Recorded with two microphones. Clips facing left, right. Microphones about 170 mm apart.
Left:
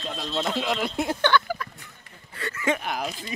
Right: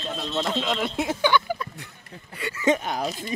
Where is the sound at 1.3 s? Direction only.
20° right (ahead or behind).